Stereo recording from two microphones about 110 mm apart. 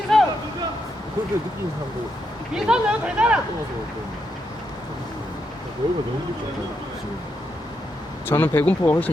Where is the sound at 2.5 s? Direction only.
10° right (ahead or behind).